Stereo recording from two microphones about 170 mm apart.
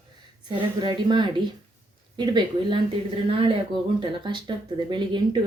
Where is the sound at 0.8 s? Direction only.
25° right (ahead or behind).